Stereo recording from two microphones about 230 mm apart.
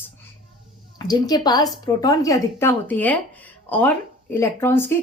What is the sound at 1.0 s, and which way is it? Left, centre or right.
Speech, centre.